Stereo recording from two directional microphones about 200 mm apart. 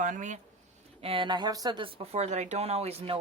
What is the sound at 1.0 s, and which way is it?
Speech, 25° right (ahead or behind).